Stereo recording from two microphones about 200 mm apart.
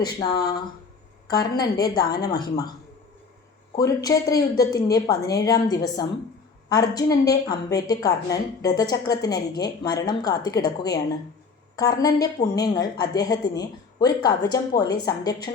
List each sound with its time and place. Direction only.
0.0 s a woman's voice: 20° left (ahead or behind)
3.8 s a woman's voice: 15° left (ahead or behind)